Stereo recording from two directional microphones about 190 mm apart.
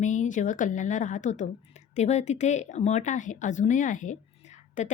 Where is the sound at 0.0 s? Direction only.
40° left (ahead or behind).